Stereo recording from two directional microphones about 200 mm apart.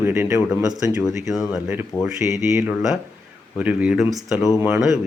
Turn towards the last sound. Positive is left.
turn(degrees=0)  # may be behind; listen again after turning